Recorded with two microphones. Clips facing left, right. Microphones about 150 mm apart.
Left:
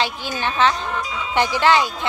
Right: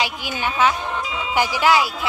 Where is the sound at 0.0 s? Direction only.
10° right (ahead or behind).